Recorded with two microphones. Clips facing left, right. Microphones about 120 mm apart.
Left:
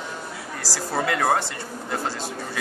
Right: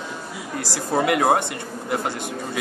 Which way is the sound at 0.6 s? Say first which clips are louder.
Right 4 dB; 20° right (ahead or behind).